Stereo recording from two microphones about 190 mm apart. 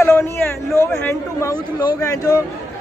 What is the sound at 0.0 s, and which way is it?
A man's voice, 15° left (ahead or behind).